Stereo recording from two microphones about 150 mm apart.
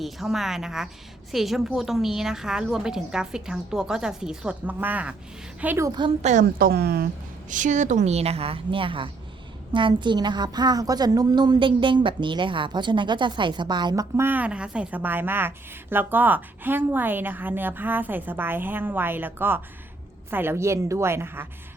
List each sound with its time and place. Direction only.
0.0 s a woman's voice: centre (ahead or behind)
6.2 s a woman's voice: 65° right (ahead or behind); by 7.1 s 90° right
7.5 s a woman's voice: 55° right (ahead or behind); by 21.4 s 15° right (ahead or behind)